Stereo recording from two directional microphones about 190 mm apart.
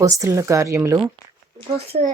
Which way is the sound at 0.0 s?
15° right (ahead or behind).